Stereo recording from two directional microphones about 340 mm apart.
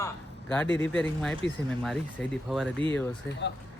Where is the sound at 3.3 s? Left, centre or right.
Left.